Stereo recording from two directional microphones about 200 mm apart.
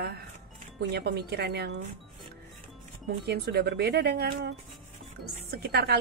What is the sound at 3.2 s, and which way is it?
A woman's voice, 55° right (ahead or behind).